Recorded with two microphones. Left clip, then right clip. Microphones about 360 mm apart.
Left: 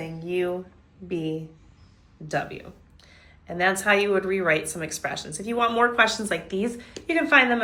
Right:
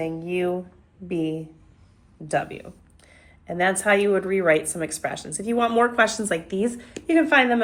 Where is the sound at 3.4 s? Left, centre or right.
Centre.